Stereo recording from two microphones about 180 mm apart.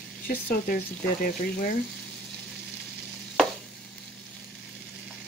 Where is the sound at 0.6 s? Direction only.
50° left (ahead or behind).